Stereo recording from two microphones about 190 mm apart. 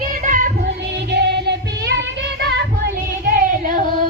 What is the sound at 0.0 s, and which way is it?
Music, 45° right (ahead or behind).